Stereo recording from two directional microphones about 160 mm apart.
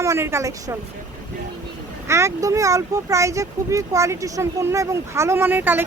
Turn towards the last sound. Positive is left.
turn(degrees=-10)  # may be behind; listen again after turning